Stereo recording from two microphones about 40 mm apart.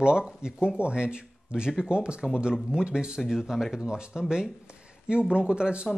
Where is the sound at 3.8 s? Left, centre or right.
Right.